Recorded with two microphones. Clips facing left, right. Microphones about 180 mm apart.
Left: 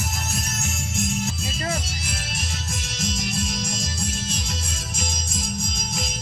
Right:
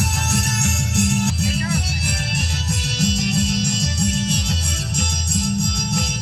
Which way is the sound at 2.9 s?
65° right (ahead or behind).